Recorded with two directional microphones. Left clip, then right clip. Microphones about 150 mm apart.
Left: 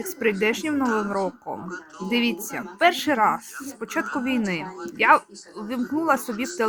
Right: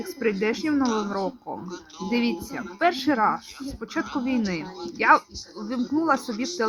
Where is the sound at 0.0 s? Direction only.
25° left (ahead or behind).